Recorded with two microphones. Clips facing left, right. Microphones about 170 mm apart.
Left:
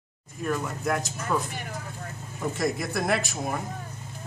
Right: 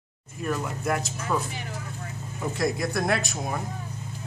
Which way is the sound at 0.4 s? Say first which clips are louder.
Even; 5° right (ahead or behind).